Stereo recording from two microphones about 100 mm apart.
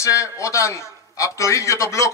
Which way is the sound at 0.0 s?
30° left (ahead or behind).